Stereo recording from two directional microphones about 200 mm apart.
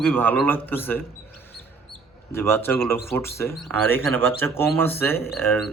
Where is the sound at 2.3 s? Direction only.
10° left (ahead or behind).